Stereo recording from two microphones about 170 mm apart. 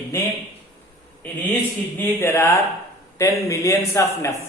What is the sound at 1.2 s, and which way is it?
A man's voice, 10° left (ahead or behind).